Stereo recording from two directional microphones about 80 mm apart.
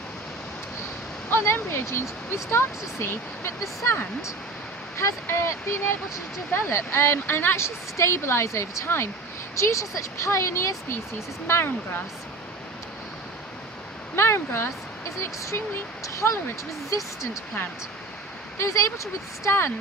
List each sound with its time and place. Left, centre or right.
1.3 s speech: left
4.9 s speech: left
14.2 s speech: left
18.6 s speech: left